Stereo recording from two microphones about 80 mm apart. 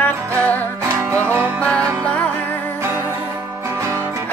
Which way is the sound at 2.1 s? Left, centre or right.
Centre.